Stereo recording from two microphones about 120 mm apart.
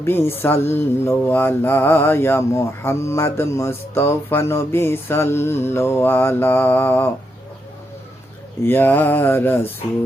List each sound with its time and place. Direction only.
0.0 s mantra: 20° left (ahead or behind)
8.6 s mantra: 20° left (ahead or behind)